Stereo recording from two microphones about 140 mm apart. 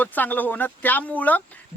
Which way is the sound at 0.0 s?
10° left (ahead or behind).